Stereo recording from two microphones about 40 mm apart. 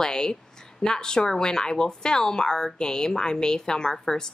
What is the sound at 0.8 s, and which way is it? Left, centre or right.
A woman's voice, centre.